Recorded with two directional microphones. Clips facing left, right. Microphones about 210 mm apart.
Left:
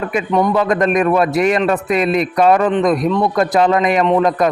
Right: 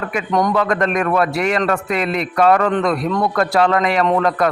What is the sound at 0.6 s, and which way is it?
A man's voice, 20° left (ahead or behind).